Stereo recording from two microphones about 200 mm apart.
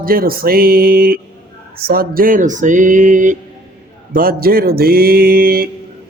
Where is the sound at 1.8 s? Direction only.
50° right (ahead or behind).